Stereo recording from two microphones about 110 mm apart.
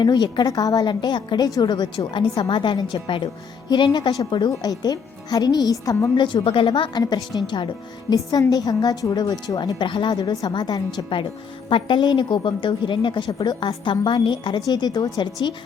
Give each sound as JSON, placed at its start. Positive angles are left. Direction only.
{"t": 0.0, "sound": "a woman's voice", "side_deg": 40}
{"t": 8.1, "sound": "a woman's voice", "side_deg": 35}